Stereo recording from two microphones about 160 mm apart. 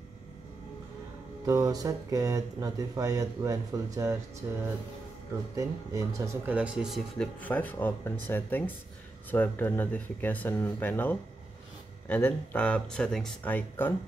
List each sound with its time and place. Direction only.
1.4 s speech: 20° right (ahead or behind)
6.5 s speech: 5° right (ahead or behind)
7.2 s speech: 10° left (ahead or behind)